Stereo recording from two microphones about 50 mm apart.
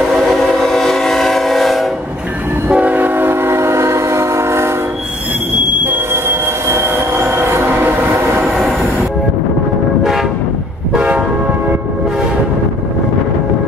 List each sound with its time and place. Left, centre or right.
0.3 s train: centre
2.7 s train: right
5.9 s train: right
8.4 s train: centre
11.0 s train: right